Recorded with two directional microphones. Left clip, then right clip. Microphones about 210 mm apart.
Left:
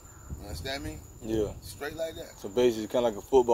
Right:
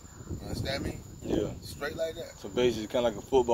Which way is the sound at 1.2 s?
20° left (ahead or behind).